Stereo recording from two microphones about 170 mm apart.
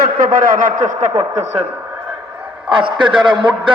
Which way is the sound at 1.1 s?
20° right (ahead or behind).